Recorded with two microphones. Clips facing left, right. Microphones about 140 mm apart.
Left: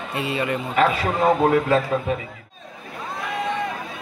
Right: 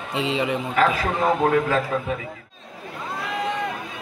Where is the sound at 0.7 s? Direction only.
25° left (ahead or behind).